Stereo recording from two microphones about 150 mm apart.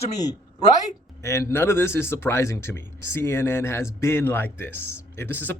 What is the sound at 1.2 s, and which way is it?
Speech, 20° left (ahead or behind).